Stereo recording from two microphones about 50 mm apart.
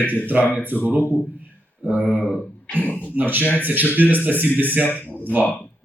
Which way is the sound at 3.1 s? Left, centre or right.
Right.